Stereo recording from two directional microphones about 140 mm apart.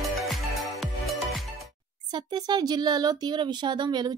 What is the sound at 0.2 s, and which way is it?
Music, centre (ahead or behind).